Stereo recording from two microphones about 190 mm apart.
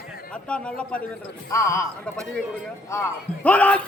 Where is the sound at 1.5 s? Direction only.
15° left (ahead or behind).